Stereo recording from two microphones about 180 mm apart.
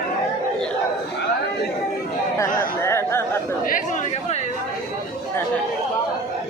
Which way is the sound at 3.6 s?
45° left (ahead or behind).